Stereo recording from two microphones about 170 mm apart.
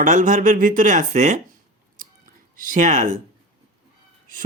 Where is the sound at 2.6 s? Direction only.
50° right (ahead or behind).